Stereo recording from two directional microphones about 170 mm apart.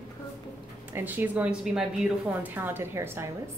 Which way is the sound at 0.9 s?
10° right (ahead or behind).